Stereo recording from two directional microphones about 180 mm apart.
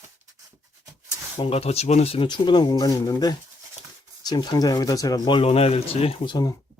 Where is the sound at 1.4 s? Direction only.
35° left (ahead or behind).